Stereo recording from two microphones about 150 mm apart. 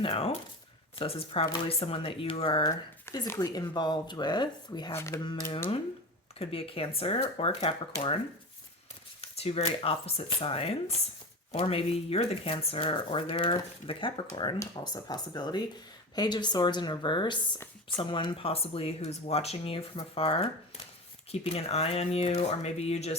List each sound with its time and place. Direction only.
0.0 s speech: 35° left (ahead or behind)
3.1 s speech: 20° left (ahead or behind)
6.4 s speech: 40° left (ahead or behind)
9.2 s speech: 45° left (ahead or behind)